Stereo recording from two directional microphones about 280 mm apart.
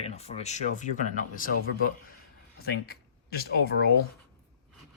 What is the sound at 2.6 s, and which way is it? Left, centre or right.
Speech, left.